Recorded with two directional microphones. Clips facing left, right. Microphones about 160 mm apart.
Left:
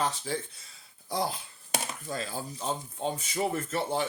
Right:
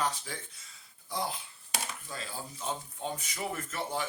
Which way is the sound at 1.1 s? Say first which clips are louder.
Left 4 dB; 35° left (ahead or behind).